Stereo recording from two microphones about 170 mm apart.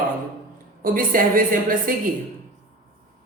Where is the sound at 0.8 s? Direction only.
55° right (ahead or behind).